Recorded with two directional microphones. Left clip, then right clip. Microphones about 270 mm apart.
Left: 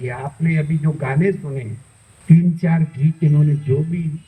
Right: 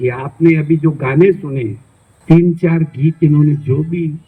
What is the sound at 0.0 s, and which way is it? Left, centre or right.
A man's voice, right.